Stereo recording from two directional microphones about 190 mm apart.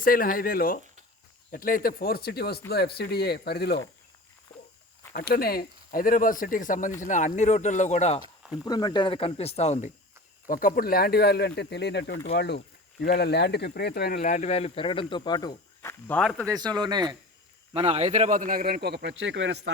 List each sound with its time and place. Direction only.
0.0 s speech: 50° left (ahead or behind)
5.1 s speech: 55° left (ahead or behind); by 8.2 s 35° left (ahead or behind)
8.5 s speech: 20° left (ahead or behind); by 9.9 s 35° left (ahead or behind)
10.4 s speech: 45° left (ahead or behind); by 16.5 s 5° left (ahead or behind)
16.7 s speech: 20° right (ahead or behind)
17.7 s a man's voice: 35° right (ahead or behind); by 19.7 s 75° right (ahead or behind)